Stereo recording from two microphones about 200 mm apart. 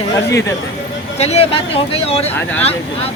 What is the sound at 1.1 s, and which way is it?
Speech, 30° left (ahead or behind).